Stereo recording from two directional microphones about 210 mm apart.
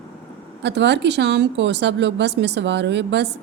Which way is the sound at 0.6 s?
55° right (ahead or behind).